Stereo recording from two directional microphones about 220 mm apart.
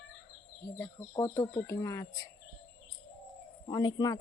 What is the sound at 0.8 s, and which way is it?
A woman's voice, 15° left (ahead or behind).